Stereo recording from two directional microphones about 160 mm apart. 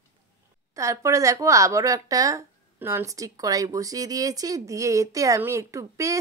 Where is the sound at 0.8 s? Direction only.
20° right (ahead or behind).